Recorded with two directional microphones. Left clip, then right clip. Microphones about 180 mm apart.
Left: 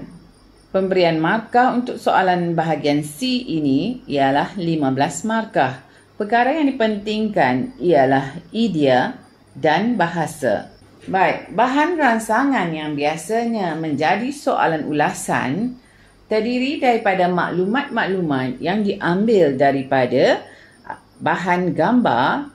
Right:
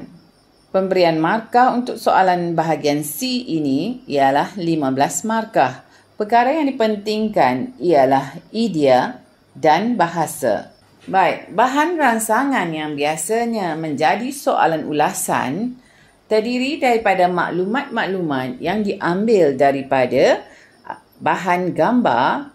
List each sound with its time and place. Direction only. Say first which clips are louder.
0.7 s a woman's voice: right 1 dB; 40° right (ahead or behind)